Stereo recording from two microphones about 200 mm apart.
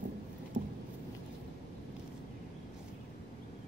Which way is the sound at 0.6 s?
40° right (ahead or behind).